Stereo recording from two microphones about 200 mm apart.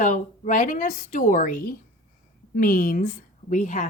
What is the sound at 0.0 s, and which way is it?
A woman's voice, 40° left (ahead or behind).